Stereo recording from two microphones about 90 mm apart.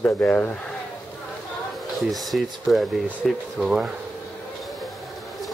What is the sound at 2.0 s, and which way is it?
Speech, centre (ahead or behind).